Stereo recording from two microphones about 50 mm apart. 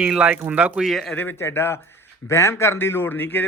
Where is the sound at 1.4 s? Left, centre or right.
Left.